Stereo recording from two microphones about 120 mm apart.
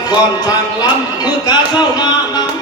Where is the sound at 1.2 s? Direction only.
35° left (ahead or behind).